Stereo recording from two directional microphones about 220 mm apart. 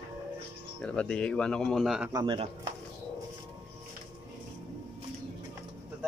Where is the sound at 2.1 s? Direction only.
20° right (ahead or behind).